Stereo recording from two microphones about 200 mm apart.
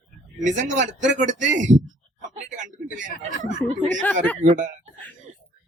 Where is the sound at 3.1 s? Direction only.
40° left (ahead or behind).